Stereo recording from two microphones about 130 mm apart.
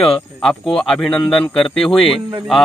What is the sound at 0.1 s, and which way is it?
A man's voice, 5° left (ahead or behind).